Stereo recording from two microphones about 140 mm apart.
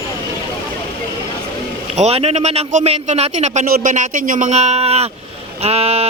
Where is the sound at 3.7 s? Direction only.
65° right (ahead or behind); by 5.0 s 50° right (ahead or behind).